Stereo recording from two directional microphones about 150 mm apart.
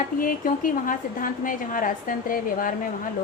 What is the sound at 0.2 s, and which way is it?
A woman's voice, 65° left (ahead or behind).